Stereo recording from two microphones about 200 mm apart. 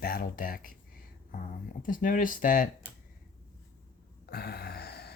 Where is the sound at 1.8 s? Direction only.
40° left (ahead or behind).